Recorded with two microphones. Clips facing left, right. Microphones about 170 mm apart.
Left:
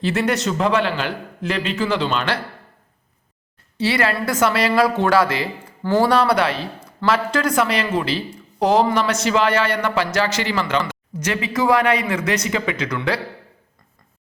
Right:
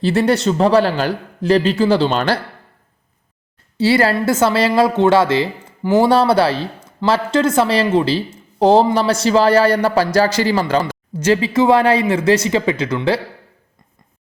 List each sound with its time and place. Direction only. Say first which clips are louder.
0.0 s speech: right 5 dB; 35° right (ahead or behind)
3.8 s a woman's voice: right 6 dB; 30° right (ahead or behind)
6.1 s a woman's voice: right 4 dB; 30° right (ahead or behind)